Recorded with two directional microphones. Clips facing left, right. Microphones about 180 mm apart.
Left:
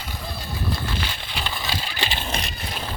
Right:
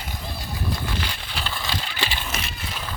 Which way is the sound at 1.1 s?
Centre (ahead or behind).